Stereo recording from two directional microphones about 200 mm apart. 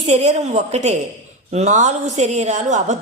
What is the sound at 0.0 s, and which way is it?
A woman's voice, 35° right (ahead or behind).